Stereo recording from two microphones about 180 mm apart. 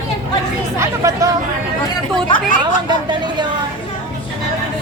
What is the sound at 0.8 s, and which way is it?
Speech, 15° right (ahead or behind).